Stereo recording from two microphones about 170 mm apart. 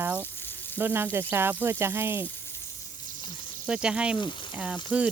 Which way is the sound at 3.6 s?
5° right (ahead or behind).